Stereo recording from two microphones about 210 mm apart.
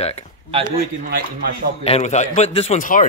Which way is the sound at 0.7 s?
40° right (ahead or behind).